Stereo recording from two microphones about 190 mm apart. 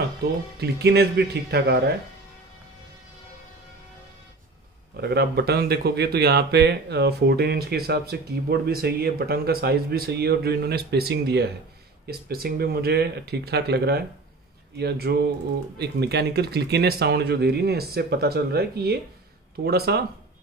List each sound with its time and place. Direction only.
0.6 s speech: 60° right (ahead or behind)
4.9 s speech: 60° right (ahead or behind)